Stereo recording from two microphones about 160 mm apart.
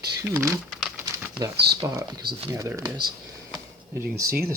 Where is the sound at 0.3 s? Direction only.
15° right (ahead or behind).